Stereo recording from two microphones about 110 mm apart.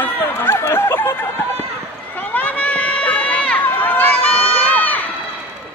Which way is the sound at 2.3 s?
15° left (ahead or behind).